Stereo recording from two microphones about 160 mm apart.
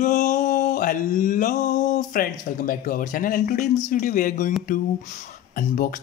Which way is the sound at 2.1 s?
60° left (ahead or behind).